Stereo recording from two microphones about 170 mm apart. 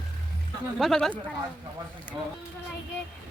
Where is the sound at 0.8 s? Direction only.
Centre (ahead or behind).